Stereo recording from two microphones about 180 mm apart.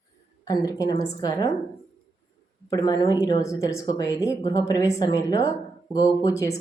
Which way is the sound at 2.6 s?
20° left (ahead or behind).